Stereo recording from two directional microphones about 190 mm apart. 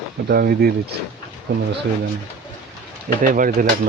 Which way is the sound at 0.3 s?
55° right (ahead or behind).